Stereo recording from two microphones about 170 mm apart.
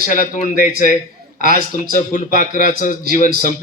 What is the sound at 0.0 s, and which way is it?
A man's voice, 50° left (ahead or behind).